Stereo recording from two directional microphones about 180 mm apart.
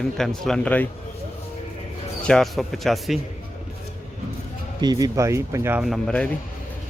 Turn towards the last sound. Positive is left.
turn(degrees=5)  # may be behind; listen again after turning